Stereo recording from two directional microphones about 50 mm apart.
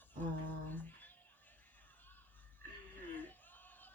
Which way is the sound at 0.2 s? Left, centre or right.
Left.